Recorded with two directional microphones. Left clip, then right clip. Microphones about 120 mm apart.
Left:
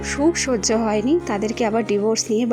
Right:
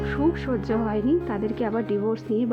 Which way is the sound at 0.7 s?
25° left (ahead or behind).